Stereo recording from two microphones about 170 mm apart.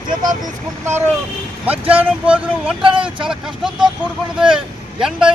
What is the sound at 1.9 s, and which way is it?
Speech, 5° right (ahead or behind).